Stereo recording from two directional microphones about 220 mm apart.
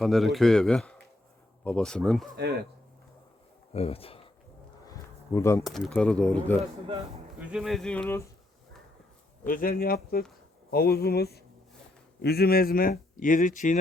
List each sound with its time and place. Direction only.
0.0 s speech: centre (ahead or behind)
2.3 s speech: 45° right (ahead or behind)
3.7 s speech: 25° left (ahead or behind)
4.9 s insect: 15° left (ahead or behind)
5.6 s speech: centre (ahead or behind)
9.5 s speech: 40° left (ahead or behind)